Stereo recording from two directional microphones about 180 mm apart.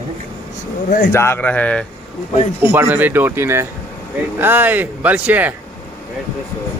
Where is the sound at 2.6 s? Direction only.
10° right (ahead or behind).